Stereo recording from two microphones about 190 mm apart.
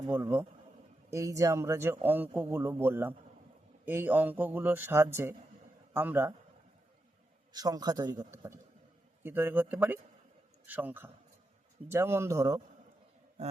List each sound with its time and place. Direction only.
0.1 s a man's voice: 10° right (ahead or behind)
7.5 s a man's voice: 20° right (ahead or behind)